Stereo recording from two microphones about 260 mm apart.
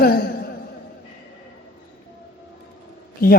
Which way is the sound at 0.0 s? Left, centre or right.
Left.